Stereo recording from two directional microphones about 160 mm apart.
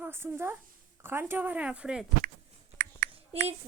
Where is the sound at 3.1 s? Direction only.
40° right (ahead or behind).